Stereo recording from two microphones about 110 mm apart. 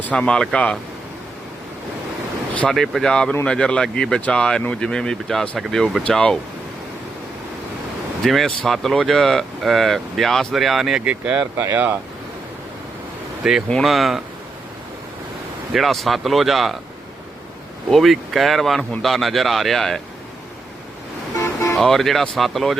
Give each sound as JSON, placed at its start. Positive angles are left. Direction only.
{"t": 0.0, "sound": "speech", "side_deg": 10}
{"t": 2.6, "sound": "speech", "side_deg": 5}
{"t": 8.2, "sound": "speech", "side_deg": 0}
{"t": 13.7, "sound": "speech", "side_deg": 5}
{"t": 15.7, "sound": "speech", "side_deg": 0}
{"t": 17.9, "sound": "speech", "side_deg": 0}
{"t": 21.3, "sound": "vehicle", "side_deg": 30}
{"t": 21.8, "sound": "speech", "side_deg": 5}